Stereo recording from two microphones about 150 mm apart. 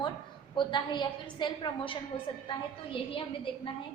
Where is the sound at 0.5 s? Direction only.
30° left (ahead or behind).